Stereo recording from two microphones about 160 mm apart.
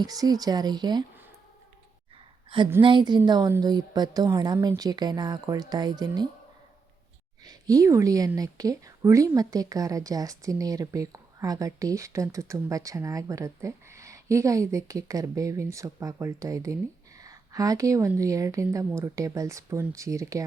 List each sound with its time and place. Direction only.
0.0 s a woman's voice: 25° right (ahead or behind)
2.8 s a woman's voice: 30° right (ahead or behind)
7.4 s a woman's voice: 20° right (ahead or behind)